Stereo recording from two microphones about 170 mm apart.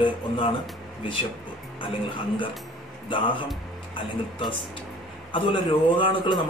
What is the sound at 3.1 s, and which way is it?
Speech, 30° left (ahead or behind).